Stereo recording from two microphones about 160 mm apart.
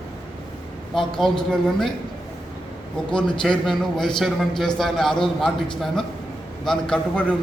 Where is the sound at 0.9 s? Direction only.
Centre (ahead or behind).